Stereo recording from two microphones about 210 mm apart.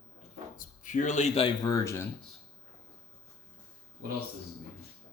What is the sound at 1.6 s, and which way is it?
Speech, 15° left (ahead or behind).